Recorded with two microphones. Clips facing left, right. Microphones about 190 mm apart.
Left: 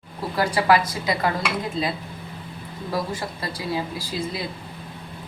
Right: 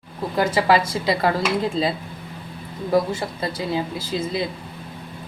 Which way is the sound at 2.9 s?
25° right (ahead or behind).